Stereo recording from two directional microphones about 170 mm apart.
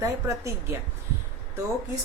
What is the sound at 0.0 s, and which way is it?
Speech, 15° right (ahead or behind).